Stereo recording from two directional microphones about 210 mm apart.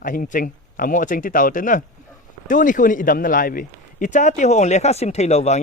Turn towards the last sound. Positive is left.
turn(degrees=30)  # may be behind; listen again after turning